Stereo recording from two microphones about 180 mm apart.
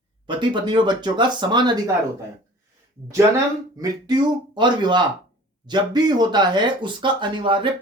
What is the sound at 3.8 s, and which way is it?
Speech, 20° right (ahead or behind).